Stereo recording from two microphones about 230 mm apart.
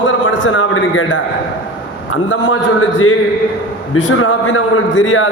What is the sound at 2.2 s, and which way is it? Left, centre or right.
A man's voice, left.